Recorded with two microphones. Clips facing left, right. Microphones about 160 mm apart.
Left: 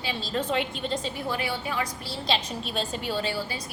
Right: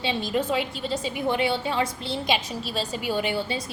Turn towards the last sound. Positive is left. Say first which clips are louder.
# right 4 dB
turn(degrees=-25)  # may be behind; listen again after turning